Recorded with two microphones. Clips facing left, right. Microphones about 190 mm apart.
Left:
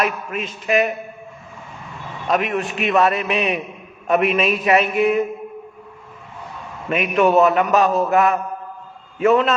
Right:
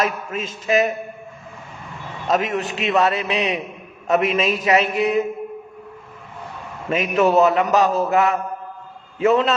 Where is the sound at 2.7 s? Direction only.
20° right (ahead or behind).